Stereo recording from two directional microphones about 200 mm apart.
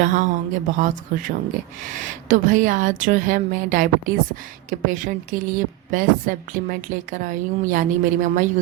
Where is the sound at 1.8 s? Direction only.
40° right (ahead or behind).